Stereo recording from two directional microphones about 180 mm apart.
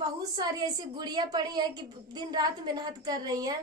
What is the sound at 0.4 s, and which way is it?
A woman's voice, 25° right (ahead or behind).